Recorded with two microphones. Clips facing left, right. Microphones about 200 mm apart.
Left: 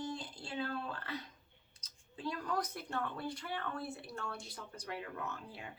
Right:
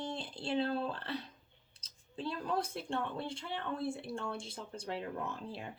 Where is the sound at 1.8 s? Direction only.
30° right (ahead or behind).